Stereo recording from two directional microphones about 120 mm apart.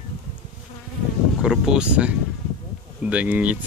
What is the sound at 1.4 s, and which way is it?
Speech, 5° right (ahead or behind).